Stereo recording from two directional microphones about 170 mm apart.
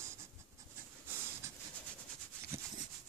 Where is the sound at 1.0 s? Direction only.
15° right (ahead or behind).